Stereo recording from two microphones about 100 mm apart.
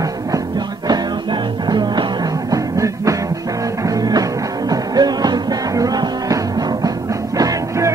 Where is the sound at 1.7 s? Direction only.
45° right (ahead or behind).